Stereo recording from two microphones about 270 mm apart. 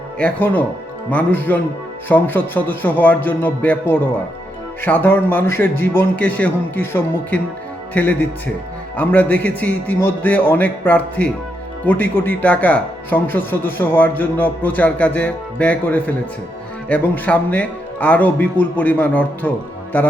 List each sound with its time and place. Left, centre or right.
0.2 s speech: centre